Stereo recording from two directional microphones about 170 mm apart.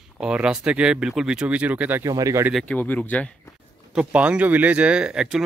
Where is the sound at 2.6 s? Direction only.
10° left (ahead or behind).